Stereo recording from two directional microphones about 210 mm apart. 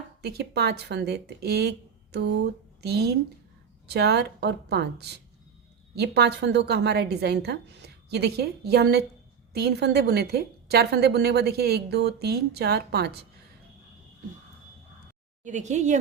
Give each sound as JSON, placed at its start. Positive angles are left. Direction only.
{"t": 0.2, "sound": "a woman's voice", "side_deg": -50}
{"t": 2.8, "sound": "a woman's voice", "side_deg": -50}
{"t": 15.4, "sound": "a woman's voice", "side_deg": -35}